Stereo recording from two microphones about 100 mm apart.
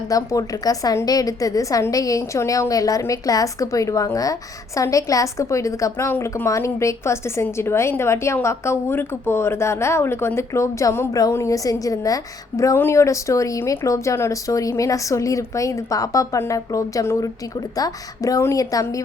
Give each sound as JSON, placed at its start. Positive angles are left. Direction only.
{"t": 0.1, "sound": "a woman's voice", "side_deg": 35}